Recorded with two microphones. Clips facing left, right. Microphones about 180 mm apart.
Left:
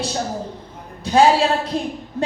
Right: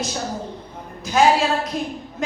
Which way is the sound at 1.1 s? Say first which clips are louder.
Left 5 dB; 30° left (ahead or behind).